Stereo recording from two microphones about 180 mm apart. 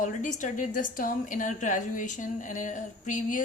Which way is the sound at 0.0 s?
45° left (ahead or behind).